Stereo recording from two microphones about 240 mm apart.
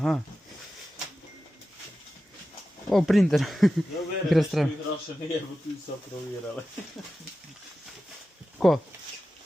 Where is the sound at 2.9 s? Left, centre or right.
Centre.